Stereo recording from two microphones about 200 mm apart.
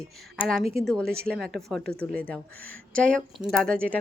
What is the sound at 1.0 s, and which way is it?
Speech, 50° right (ahead or behind).